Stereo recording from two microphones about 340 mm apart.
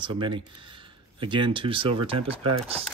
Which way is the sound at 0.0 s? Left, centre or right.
Centre.